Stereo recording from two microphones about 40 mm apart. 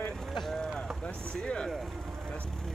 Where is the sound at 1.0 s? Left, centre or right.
Left.